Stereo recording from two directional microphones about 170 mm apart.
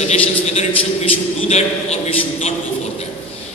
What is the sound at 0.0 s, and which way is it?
A man's voice, 40° left (ahead or behind).